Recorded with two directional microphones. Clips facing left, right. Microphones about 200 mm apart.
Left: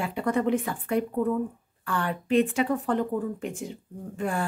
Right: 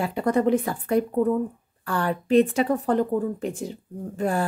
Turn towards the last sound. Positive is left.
turn(degrees=-40)  # may be behind; listen again after turning